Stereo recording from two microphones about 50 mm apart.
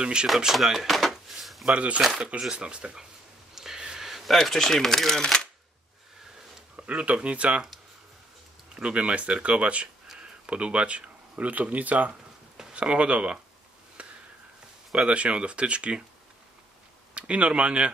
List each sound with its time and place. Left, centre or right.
0.0 s speech: centre
0.5 s drawer open or close: centre
1.7 s speech: right
2.0 s speech: centre
3.5 s a sound: centre
6.8 s speech: right
8.7 s speech: right
14.0 s a sound: right
15.0 s speech: right
17.1 s speech: right